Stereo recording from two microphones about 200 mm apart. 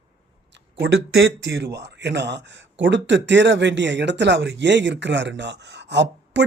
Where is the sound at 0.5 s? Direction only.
60° right (ahead or behind).